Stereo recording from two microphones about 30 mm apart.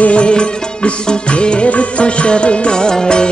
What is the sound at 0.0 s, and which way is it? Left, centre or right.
Music, left.